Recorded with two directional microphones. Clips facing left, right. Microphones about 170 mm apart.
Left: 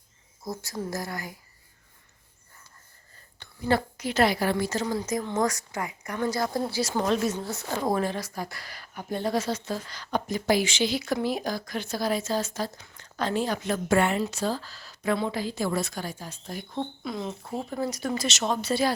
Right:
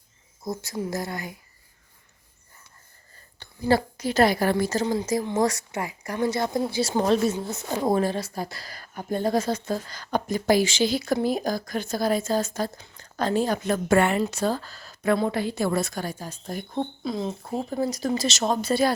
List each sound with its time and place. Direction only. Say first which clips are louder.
0.4 s speech: right 3 dB; 25° right (ahead or behind)
3.4 s a woman's voice: right 3 dB; 35° right (ahead or behind)
4.9 s speech: right 4 dB; 25° right (ahead or behind)
7.0 s speech: right 4 dB; 30° right (ahead or behind)
7.4 s speech: right 3 dB; 20° right (ahead or behind); by 12.8 s 50° right (ahead or behind)
12.8 s speech: right 3 dB; 40° right (ahead or behind)
17.0 s speech: right 4 dB; 30° right (ahead or behind)
17.7 s speech: right 4 dB; 30° right (ahead or behind); by 18.9 s 50° right (ahead or behind)